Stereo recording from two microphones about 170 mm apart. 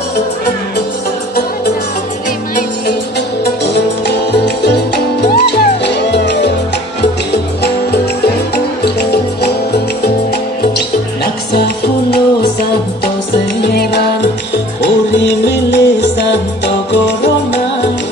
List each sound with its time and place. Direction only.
3.4 s music: 80° left
7.6 s music: 70° left (ahead or behind)
11.5 s music: 70° left (ahead or behind)
14.8 s music: 90° left